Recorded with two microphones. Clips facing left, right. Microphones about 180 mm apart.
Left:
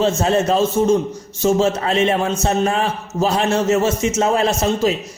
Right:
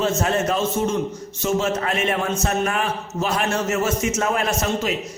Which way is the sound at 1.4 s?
35° left (ahead or behind).